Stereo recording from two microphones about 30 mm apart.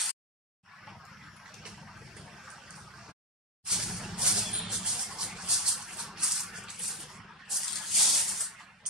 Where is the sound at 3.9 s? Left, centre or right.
Centre.